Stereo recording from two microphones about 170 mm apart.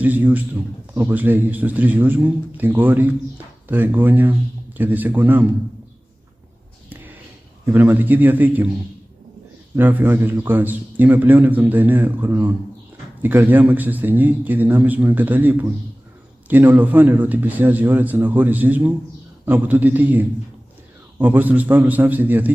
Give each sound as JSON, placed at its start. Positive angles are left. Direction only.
{"t": 0.0, "sound": "a man's voice", "side_deg": -10}
{"t": 6.9, "sound": "a sound", "side_deg": -10}
{"t": 7.6, "sound": "a man's voice", "side_deg": -10}
{"t": 9.8, "sound": "a man's voice", "side_deg": -10}